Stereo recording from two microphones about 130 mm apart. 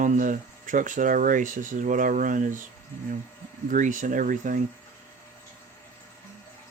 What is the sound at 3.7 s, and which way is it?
Speech, 80° right.